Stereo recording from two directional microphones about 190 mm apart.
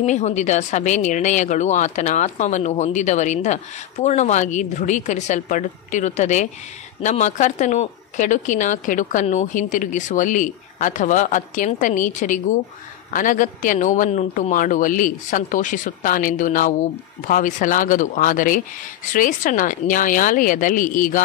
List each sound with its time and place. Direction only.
0.0 s a woman's voice: 40° left (ahead or behind)